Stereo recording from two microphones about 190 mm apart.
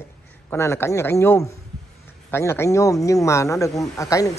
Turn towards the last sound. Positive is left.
turn(degrees=15)  # may be behind; listen again after turning